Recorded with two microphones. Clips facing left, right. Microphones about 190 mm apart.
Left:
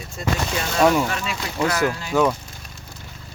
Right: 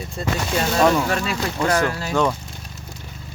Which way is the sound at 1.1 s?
40° right (ahead or behind).